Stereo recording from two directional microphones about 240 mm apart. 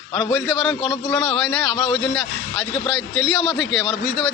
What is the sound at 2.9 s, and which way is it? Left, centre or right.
A man's voice, left.